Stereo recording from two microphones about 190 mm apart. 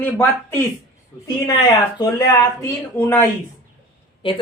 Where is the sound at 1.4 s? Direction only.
20° left (ahead or behind).